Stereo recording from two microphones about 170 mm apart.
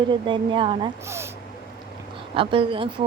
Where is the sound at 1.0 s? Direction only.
15° right (ahead or behind).